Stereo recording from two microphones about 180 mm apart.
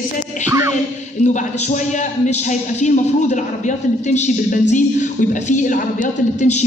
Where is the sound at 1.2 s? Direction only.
40° left (ahead or behind).